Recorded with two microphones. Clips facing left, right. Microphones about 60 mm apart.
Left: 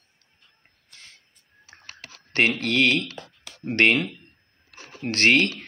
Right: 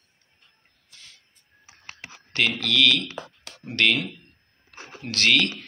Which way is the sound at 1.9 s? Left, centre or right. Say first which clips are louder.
Right 3 dB; right.